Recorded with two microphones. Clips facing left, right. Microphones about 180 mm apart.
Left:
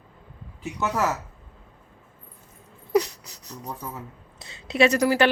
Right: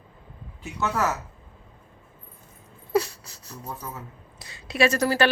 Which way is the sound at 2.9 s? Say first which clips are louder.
Left 2 dB; 20° left (ahead or behind).